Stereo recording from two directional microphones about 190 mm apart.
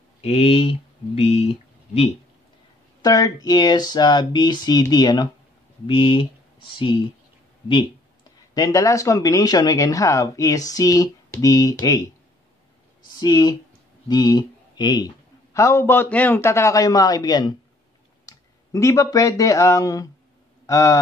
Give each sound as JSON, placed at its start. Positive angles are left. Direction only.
{"t": 0.2, "sound": "speech", "side_deg": 30}
{"t": 3.0, "sound": "speech", "side_deg": 20}
{"t": 13.2, "sound": "speech", "side_deg": 20}
{"t": 20.6, "sound": "a sound", "side_deg": 20}